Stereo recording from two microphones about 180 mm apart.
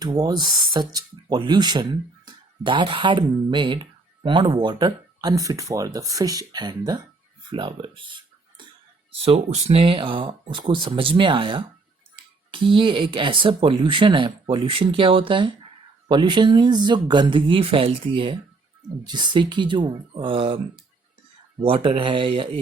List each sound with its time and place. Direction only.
0.0 s speech: 20° right (ahead or behind)